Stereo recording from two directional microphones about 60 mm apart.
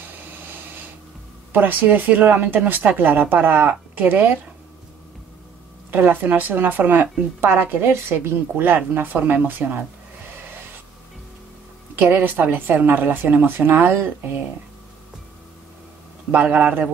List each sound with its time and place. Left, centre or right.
1.5 s a woman's voice: right
5.9 s a woman's voice: right
11.9 s a woman's voice: right
16.3 s a man's voice: right